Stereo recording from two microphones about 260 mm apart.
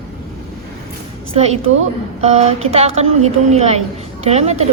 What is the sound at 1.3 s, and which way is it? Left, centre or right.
A woman's voice, right.